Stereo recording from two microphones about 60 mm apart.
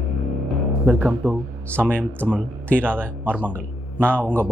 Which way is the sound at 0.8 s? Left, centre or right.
Right.